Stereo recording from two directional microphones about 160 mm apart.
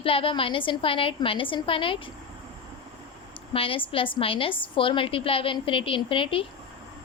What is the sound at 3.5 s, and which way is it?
A woman's voice, 35° left (ahead or behind).